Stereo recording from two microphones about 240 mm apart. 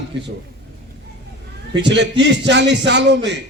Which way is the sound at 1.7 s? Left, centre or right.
Right.